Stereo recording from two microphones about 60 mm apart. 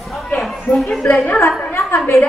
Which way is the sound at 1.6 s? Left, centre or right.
Left.